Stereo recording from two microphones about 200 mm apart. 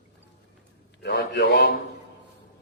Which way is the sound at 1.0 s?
55° left (ahead or behind).